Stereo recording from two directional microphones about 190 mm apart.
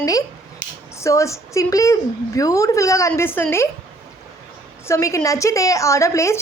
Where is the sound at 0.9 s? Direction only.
15° left (ahead or behind).